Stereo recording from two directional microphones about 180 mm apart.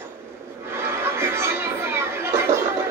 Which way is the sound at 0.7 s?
15° right (ahead or behind).